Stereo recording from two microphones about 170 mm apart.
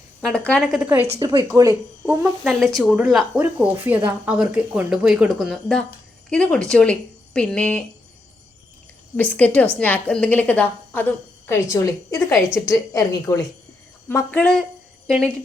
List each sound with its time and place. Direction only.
0.2 s speech: 5° left (ahead or behind)
1.2 s speech: 20° right (ahead or behind)
2.4 s a woman's voice: centre (ahead or behind)
9.1 s a woman's voice: 10° left (ahead or behind)